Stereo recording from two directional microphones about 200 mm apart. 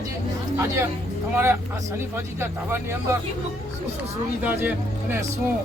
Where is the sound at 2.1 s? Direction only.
10° right (ahead or behind).